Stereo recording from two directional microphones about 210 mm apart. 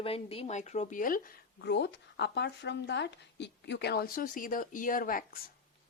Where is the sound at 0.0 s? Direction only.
25° left (ahead or behind).